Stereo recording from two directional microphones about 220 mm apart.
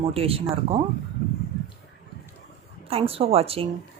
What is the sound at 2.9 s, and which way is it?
Speech, 25° right (ahead or behind).